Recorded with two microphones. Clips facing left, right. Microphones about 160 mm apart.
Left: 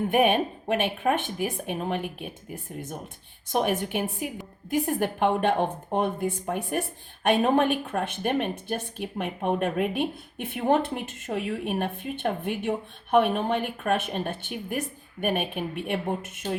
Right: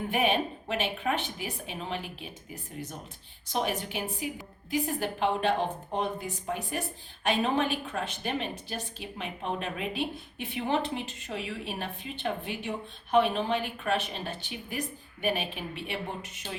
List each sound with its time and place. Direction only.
0.1 s a woman's voice: 50° left (ahead or behind)
3.5 s a woman's voice: 55° left (ahead or behind)